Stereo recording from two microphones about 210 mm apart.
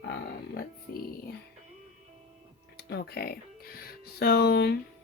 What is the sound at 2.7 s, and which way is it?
Speech, 50° left (ahead or behind).